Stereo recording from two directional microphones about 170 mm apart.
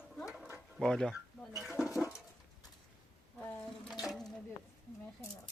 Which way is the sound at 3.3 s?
5° left (ahead or behind).